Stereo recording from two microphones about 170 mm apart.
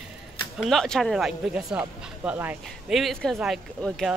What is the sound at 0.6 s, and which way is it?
Speech, 5° left (ahead or behind).